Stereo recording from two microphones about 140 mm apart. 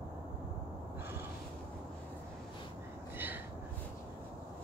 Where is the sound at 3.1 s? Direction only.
15° right (ahead or behind).